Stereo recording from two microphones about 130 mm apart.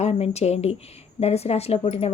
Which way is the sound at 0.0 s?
55° left (ahead or behind).